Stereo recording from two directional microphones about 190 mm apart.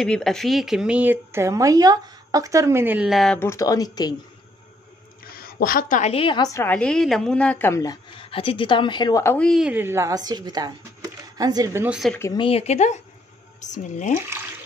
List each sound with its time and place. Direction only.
0.0 s speech: 5° left (ahead or behind)
3.3 s speech: 15° left (ahead or behind)
5.4 s a woman's voice: 50° left (ahead or behind); by 12.0 s 10° right (ahead or behind)
12.2 s a woman's voice: 20° left (ahead or behind)
12.4 s speech: 35° left (ahead or behind)